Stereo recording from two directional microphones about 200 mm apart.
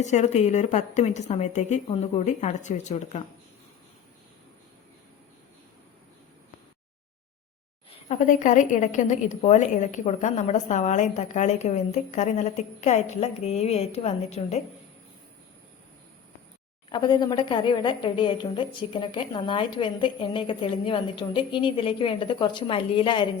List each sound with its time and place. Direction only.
0.0 s a woman's voice: 35° left (ahead or behind)
7.9 s a woman's voice: 35° left (ahead or behind)
16.9 s a woman's voice: 20° left (ahead or behind)